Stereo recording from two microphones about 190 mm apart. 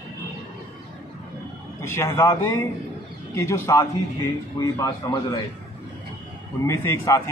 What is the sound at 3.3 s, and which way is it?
A man's voice, 15° left (ahead or behind).